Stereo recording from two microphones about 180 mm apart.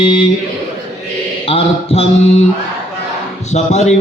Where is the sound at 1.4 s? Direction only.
30° left (ahead or behind).